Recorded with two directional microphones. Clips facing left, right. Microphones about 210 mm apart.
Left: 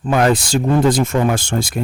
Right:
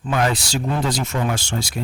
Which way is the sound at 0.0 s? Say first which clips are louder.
Left 6 dB; 50° left (ahead or behind).